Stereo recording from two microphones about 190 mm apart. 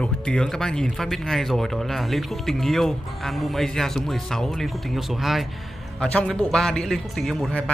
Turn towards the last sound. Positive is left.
turn(degrees=5)  # may be behind; listen again after turning